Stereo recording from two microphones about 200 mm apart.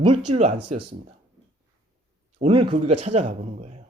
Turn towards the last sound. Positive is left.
turn(degrees=-35)  # may be behind; listen again after turning